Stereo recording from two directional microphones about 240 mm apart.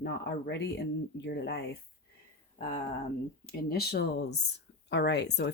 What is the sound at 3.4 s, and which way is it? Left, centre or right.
Speech, left.